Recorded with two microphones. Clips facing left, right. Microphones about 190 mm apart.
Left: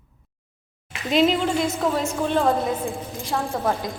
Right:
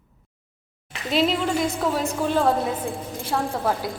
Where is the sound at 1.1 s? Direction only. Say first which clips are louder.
Left 2 dB; centre (ahead or behind).